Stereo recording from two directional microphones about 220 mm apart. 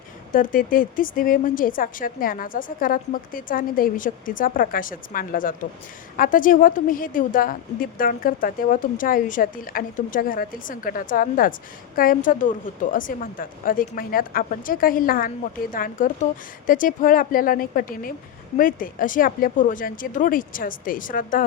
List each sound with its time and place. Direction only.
0.3 s a woman's voice: 40° left (ahead or behind)